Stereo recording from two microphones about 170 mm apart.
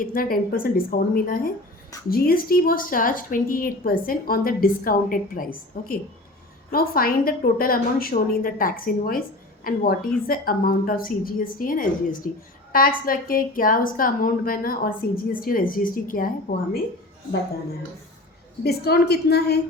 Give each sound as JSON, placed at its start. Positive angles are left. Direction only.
{"t": 0.0, "sound": "a woman's voice", "side_deg": 55}
{"t": 18.6, "sound": "a woman's voice", "side_deg": 70}